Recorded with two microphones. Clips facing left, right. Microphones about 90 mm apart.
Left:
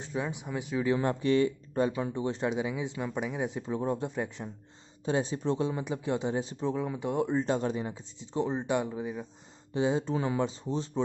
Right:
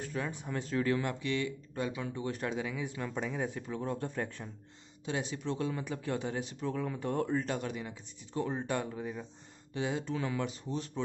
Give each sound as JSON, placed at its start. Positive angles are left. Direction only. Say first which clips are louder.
{"t": 0.0, "sound": "speech", "louder": "left 3 dB", "side_deg": 15}
{"t": 0.9, "sound": "speech", "louder": "left 7 dB", "side_deg": 35}
{"t": 5.0, "sound": "speech", "louder": "left 7 dB", "side_deg": 35}
{"t": 7.3, "sound": "speech", "louder": "left 6 dB", "side_deg": 30}
{"t": 9.8, "sound": "speech", "louder": "left 6 dB", "side_deg": 30}